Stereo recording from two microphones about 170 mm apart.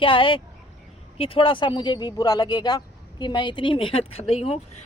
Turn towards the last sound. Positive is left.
turn(degrees=35)  # may be behind; listen again after turning